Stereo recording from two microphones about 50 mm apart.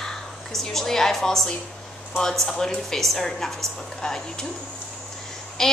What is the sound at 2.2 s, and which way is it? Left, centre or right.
A woman's voice, centre.